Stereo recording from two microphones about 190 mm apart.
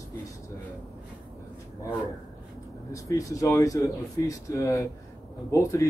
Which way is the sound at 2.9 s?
15° left (ahead or behind).